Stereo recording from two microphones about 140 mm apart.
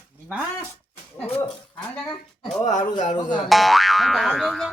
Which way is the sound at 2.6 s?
60° left (ahead or behind).